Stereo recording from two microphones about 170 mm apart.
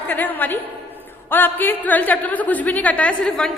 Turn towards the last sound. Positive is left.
turn(degrees=5)  # may be behind; listen again after turning